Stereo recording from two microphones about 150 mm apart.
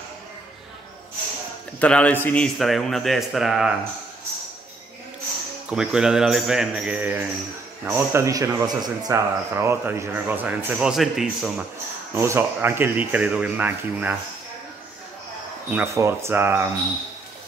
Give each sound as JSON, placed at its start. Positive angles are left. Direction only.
{"t": 1.8, "sound": "a man's voice", "side_deg": 10}
{"t": 5.7, "sound": "a man's voice", "side_deg": -5}
{"t": 12.1, "sound": "speech", "side_deg": -15}
{"t": 15.7, "sound": "speech", "side_deg": -15}